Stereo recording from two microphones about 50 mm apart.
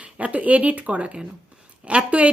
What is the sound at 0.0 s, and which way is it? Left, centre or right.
Speech, right.